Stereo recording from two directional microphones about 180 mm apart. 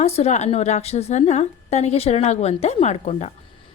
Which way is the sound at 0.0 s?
35° left (ahead or behind).